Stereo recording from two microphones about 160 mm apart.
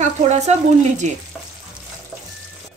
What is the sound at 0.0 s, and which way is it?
Frying, 45° right (ahead or behind).